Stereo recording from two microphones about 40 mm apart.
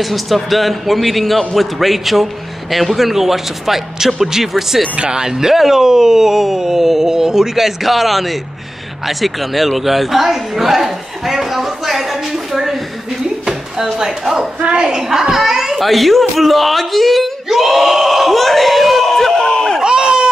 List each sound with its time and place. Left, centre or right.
0.0 s a man's voice: centre
13.9 s speech: centre
14.6 s a woman's voice: right
14.9 s a child's voice: centre
15.8 s a sound: centre
19.8 s crowd: right